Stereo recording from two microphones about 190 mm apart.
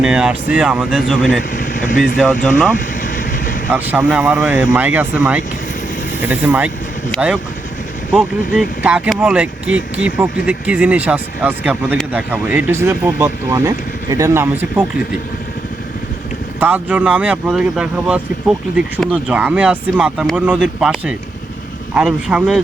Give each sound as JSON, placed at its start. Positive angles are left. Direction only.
{"t": 0.0, "sound": "speech", "side_deg": -5}
{"t": 1.5, "sound": "speech", "side_deg": 45}
{"t": 2.7, "sound": "vehicle", "side_deg": 45}
{"t": 3.7, "sound": "speech", "side_deg": -10}
{"t": 16.6, "sound": "speech", "side_deg": -10}